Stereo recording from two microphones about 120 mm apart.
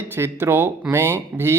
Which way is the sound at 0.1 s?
20° right (ahead or behind).